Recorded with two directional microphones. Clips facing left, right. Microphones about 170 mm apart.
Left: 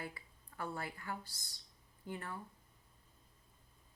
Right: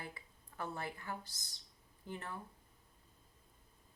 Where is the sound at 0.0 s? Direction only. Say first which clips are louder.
Left 2 dB; 20° right (ahead or behind).